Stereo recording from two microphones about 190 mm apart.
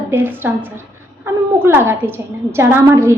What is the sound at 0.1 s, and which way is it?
A woman's voice, 10° right (ahead or behind).